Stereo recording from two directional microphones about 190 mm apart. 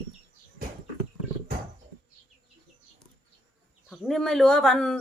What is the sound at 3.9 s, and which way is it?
Speech, centre (ahead or behind).